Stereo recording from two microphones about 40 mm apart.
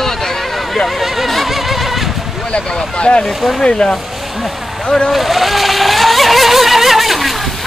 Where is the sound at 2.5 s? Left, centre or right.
Left.